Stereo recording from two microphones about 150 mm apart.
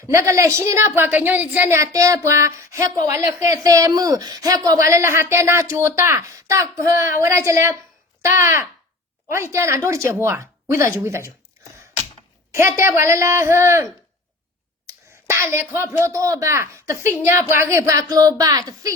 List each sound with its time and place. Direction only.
0.1 s a man's voice: 20° right (ahead or behind)
12.5 s a woman's voice: 20° right (ahead or behind)
14.8 s a sound: 20° right (ahead or behind)
15.7 s a man's voice: 15° right (ahead or behind)